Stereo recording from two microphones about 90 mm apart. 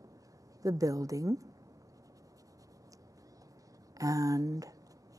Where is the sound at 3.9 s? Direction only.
40° right (ahead or behind).